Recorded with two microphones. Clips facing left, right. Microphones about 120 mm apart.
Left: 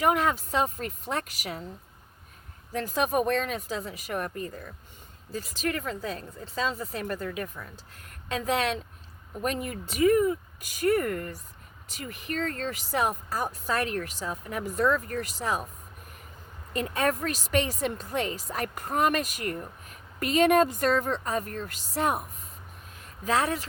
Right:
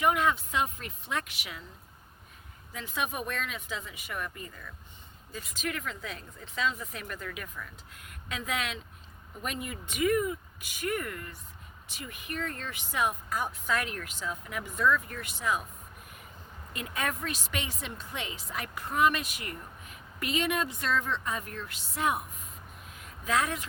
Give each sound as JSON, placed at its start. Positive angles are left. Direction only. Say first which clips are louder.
{"t": 0.0, "sound": "speech", "louder": "left 2 dB", "side_deg": 35}
{"t": 2.7, "sound": "speech", "louder": "left 8 dB", "side_deg": 40}
{"t": 16.7, "sound": "speech", "louder": "left 7 dB", "side_deg": 35}
{"t": 23.0, "sound": "a sound", "louder": "left 3 dB", "side_deg": 35}